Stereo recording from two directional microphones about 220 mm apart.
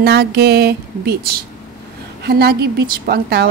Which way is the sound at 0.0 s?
45° right (ahead or behind).